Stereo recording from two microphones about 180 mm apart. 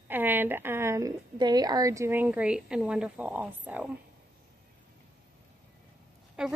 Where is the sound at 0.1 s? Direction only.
10° right (ahead or behind).